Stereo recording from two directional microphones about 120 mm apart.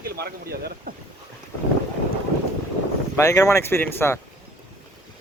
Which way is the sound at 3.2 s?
25° left (ahead or behind).